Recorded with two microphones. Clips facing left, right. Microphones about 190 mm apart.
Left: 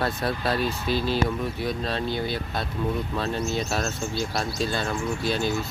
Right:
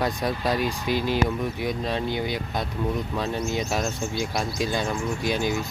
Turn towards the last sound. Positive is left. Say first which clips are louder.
# even
turn(degrees=-15)  # may be behind; listen again after turning